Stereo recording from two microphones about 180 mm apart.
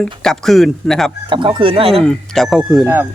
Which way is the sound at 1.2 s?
25° right (ahead or behind).